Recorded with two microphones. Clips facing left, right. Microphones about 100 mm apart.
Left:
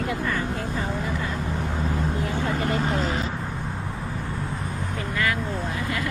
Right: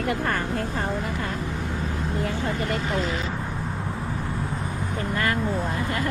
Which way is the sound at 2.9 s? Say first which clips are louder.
Left 1 dB; 40° left (ahead or behind).